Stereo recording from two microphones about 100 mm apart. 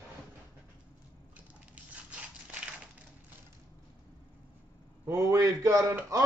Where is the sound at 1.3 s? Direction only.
15° right (ahead or behind).